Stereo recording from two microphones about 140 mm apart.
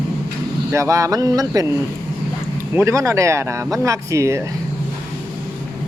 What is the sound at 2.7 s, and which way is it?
Speech, 15° right (ahead or behind).